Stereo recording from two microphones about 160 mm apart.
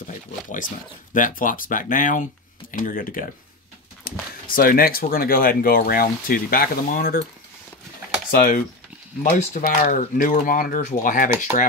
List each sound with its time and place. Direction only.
1.1 s speech: 55° left (ahead or behind)
8.3 s speech: 65° left (ahead or behind)
9.2 s speech: 55° left (ahead or behind)